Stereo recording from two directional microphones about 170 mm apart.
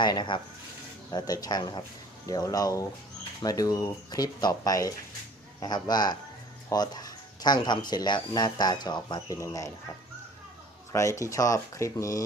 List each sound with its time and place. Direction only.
0.0 s speech: 25° left (ahead or behind)
10.9 s speech: 15° left (ahead or behind)